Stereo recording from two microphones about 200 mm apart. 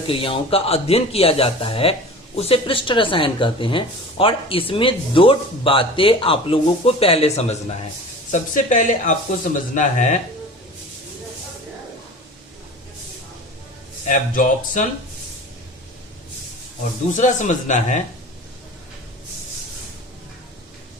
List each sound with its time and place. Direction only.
0.1 s speech: 25° left (ahead or behind)
14.1 s speech: 40° left (ahead or behind)
17.2 s speech: 35° left (ahead or behind)